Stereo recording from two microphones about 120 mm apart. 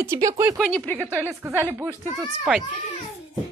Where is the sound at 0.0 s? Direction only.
25° right (ahead or behind).